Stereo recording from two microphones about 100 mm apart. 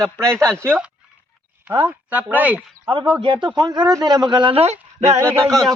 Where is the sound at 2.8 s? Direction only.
50° right (ahead or behind).